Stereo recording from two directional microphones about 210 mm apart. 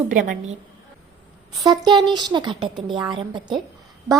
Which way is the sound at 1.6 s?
20° right (ahead or behind).